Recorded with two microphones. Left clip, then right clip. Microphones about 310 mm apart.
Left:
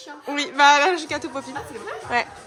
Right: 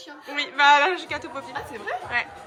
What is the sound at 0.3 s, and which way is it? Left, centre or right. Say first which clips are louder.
Speech: left 2 dB; centre.